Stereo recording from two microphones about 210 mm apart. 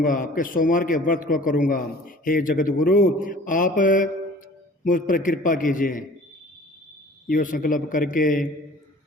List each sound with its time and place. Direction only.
0.0 s a man's voice: 40° left (ahead or behind)
7.3 s a man's voice: 40° left (ahead or behind)